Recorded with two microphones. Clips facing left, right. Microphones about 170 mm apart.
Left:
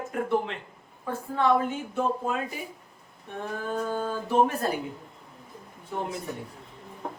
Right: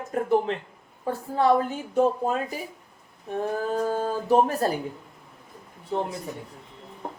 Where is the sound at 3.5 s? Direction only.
35° right (ahead or behind).